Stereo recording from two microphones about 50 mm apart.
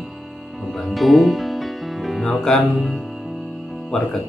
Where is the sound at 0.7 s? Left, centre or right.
Centre.